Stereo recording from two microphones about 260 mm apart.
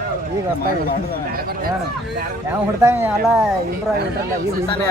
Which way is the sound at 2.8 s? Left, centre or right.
Centre.